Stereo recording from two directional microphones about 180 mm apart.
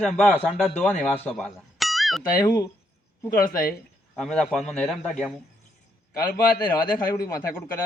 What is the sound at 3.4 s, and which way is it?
Speech, 55° left (ahead or behind).